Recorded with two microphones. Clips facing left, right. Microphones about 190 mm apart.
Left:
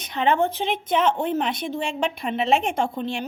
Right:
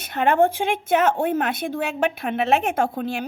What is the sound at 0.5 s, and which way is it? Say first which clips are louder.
A woman's voice: right 3 dB; 10° right (ahead or behind).